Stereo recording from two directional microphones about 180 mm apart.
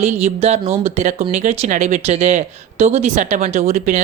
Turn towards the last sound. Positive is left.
turn(degrees=-45)  # may be behind; listen again after turning